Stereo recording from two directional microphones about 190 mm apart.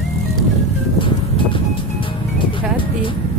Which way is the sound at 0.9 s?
25° left (ahead or behind).